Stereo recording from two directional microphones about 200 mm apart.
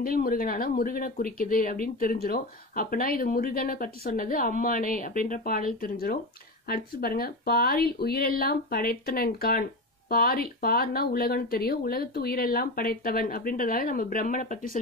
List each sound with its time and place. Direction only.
0.0 s speech: 45° left (ahead or behind)